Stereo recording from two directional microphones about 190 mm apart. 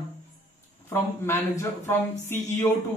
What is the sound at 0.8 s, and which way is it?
Speech, 15° left (ahead or behind).